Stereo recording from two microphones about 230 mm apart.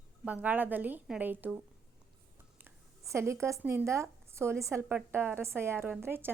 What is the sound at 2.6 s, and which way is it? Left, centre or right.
Speech, centre.